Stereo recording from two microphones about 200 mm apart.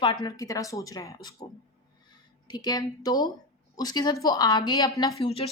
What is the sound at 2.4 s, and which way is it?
A woman's voice, 20° left (ahead or behind).